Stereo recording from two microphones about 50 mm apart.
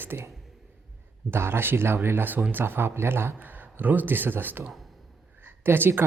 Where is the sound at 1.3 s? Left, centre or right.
Right.